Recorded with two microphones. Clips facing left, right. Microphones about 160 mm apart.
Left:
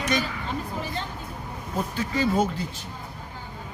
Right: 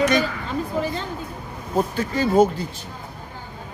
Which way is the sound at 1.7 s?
45° right (ahead or behind).